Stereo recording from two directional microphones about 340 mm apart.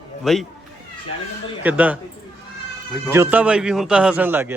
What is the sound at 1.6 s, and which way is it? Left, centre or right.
Speech, centre.